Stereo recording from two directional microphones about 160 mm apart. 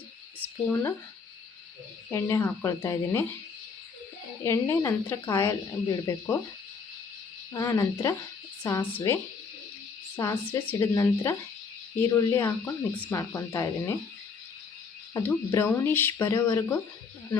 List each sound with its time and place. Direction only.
0.7 s a woman's voice: 20° left (ahead or behind)
2.0 s a woman's voice: 20° left (ahead or behind)
4.4 s a woman's voice: 20° left (ahead or behind)
7.5 s a woman's voice: 20° left (ahead or behind)
15.1 s speech: 15° left (ahead or behind)